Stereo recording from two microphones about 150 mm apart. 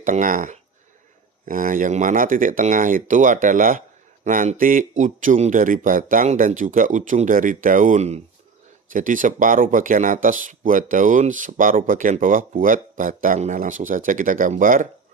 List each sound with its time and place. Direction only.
0.0 s speech: 60° right (ahead or behind); by 8.2 s 45° right (ahead or behind)
8.9 s speech: 60° right (ahead or behind)